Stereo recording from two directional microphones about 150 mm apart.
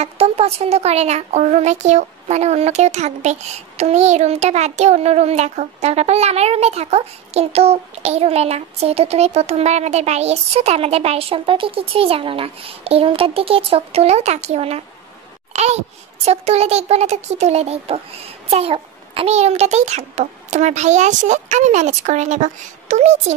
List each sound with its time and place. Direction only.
0.0 s a woman's voice: 45° right (ahead or behind)